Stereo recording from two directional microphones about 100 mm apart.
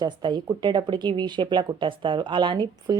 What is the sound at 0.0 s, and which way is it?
Speech, 45° right (ahead or behind).